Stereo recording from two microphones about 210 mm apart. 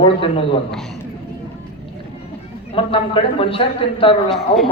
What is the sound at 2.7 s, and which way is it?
A man's voice, 25° left (ahead or behind).